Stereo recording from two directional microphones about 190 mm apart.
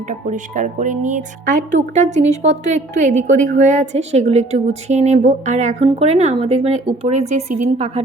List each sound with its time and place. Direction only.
0.1 s speech: 40° right (ahead or behind)